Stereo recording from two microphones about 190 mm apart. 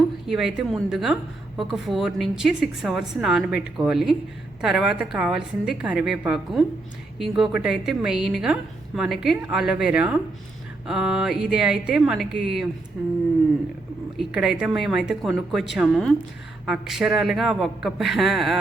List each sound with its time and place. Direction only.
0.3 s a woman's voice: centre (ahead or behind)
14.2 s a woman's voice: 5° right (ahead or behind)